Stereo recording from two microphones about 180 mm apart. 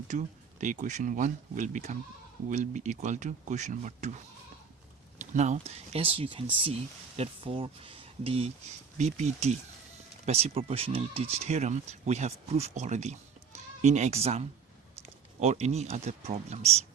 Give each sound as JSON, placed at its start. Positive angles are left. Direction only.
{"t": 0.1, "sound": "speech", "side_deg": -45}
{"t": 5.2, "sound": "speech", "side_deg": -40}